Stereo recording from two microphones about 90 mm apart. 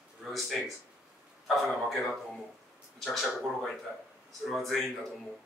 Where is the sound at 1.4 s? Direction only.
Centre (ahead or behind).